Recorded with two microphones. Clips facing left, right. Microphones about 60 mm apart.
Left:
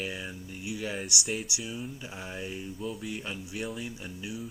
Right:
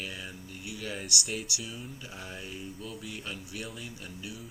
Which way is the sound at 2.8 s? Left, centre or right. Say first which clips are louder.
Left 6 dB; centre.